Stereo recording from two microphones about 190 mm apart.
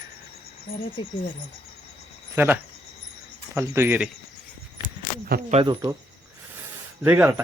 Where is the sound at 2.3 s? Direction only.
10° right (ahead or behind).